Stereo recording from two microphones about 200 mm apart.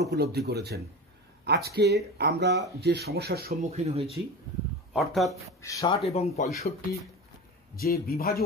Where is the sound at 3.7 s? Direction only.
30° right (ahead or behind).